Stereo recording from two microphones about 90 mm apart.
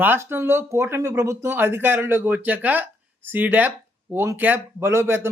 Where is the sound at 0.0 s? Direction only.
25° right (ahead or behind).